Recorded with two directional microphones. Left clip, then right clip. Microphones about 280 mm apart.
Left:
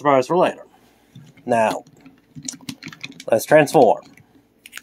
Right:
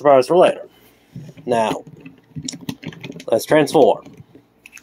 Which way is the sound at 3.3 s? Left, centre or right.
Left.